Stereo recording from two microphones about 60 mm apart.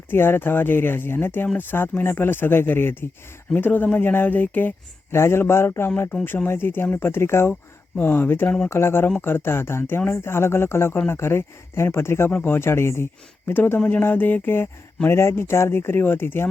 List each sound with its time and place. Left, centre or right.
0.1 s speech: left
5.1 s speech: left
7.9 s speech: left
12.3 s speech: left
12.5 s speech: left